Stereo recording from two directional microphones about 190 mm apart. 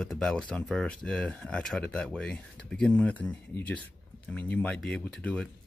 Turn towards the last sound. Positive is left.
turn(degrees=5)  # may be behind; listen again after turning